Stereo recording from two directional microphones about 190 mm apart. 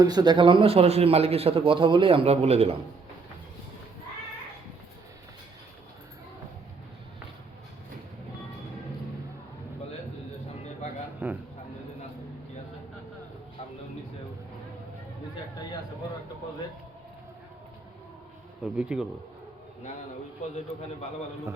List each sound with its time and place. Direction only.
0.0 s a man's voice: 20° right (ahead or behind)
11.2 s a man's voice: 10° right (ahead or behind)
18.6 s speech: 5° right (ahead or behind)